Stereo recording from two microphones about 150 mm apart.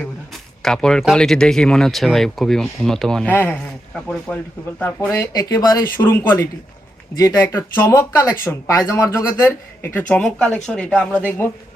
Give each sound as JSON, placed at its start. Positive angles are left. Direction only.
{"t": 0.6, "sound": "speech", "side_deg": 5}